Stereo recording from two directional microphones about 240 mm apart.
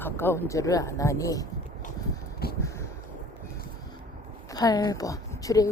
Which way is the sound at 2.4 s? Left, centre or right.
Left.